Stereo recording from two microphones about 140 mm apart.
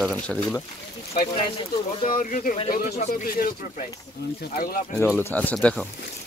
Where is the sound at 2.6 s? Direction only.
85° left.